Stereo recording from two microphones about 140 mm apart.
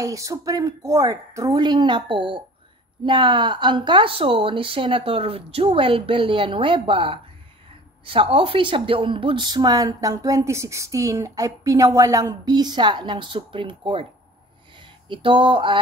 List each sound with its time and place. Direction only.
0.0 s a woman's voice: 25° right (ahead or behind)
15.0 s speech: 40° right (ahead or behind)